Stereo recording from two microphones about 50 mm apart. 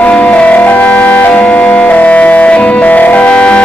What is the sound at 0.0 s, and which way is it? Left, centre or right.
Music, left.